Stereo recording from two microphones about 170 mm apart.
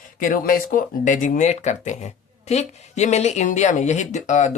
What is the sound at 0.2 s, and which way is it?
Speech, 55° left (ahead or behind).